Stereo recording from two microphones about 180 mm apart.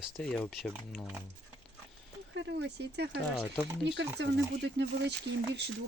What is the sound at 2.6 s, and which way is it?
Speech, 70° right (ahead or behind).